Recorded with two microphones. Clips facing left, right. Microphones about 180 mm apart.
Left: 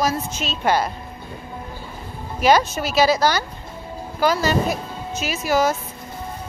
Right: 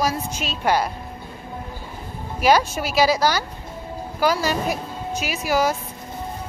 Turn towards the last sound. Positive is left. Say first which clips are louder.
# left 1 dB
turn(degrees=-10)  # may be behind; listen again after turning